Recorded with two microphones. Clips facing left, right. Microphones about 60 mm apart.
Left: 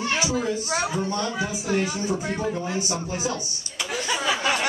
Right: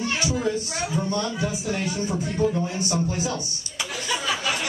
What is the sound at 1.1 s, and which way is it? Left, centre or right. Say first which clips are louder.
Speech: even; left.